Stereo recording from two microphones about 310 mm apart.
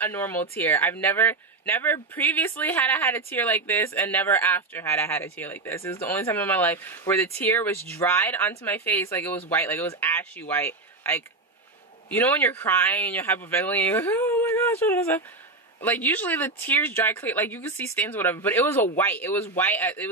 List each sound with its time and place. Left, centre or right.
0.0 s speech: centre